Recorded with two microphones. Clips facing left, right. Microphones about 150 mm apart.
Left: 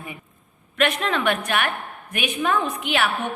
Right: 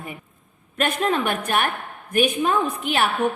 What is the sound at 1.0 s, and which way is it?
A woman's voice, 40° right (ahead or behind).